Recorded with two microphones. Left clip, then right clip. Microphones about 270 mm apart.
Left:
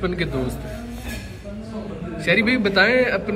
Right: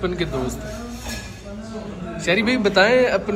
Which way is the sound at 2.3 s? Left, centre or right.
Centre.